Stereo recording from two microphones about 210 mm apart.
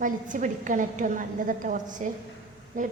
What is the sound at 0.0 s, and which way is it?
A woman's voice, 40° right (ahead or behind).